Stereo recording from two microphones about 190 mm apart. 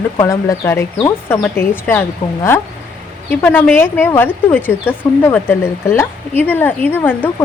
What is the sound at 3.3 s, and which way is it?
Speech, 10° left (ahead or behind).